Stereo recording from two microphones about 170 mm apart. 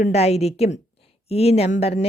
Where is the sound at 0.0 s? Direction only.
40° left (ahead or behind).